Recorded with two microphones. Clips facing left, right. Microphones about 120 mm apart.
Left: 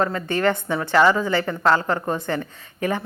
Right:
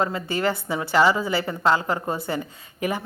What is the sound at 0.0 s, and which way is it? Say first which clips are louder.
A woman's voice: left 3 dB; 10° right (ahead or behind).